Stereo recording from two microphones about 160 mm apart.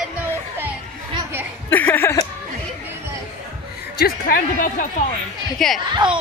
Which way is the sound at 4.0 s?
70° left (ahead or behind).